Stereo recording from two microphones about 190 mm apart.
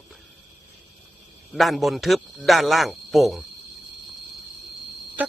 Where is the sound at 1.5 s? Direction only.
Centre (ahead or behind).